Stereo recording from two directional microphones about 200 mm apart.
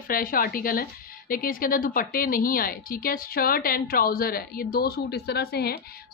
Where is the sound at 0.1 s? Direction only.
45° left (ahead or behind).